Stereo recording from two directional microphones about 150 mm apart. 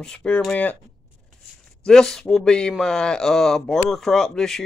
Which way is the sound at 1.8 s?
5° left (ahead or behind).